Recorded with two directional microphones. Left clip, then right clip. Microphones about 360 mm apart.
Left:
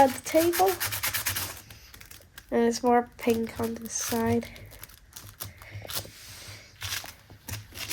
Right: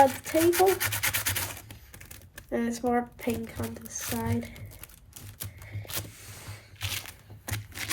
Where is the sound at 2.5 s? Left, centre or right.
Left.